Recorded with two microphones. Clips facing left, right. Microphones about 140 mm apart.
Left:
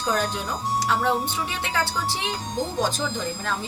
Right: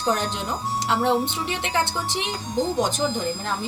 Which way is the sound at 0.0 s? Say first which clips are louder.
Right 1 dB; 20° right (ahead or behind).